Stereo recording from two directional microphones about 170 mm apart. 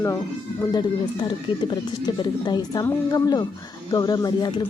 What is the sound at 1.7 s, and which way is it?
Speech, 25° left (ahead or behind).